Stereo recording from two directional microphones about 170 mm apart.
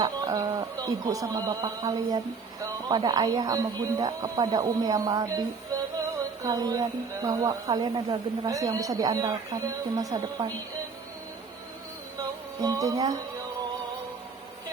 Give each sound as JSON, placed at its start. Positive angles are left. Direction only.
{"t": 0.0, "sound": "speech", "side_deg": -25}
{"t": 5.7, "sound": "music", "side_deg": -20}
{"t": 6.4, "sound": "speech", "side_deg": -20}
{"t": 12.6, "sound": "speech", "side_deg": -20}